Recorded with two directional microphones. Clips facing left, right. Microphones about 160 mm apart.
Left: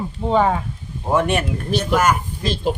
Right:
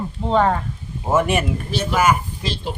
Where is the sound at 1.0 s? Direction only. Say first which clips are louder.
Even; 5° right (ahead or behind).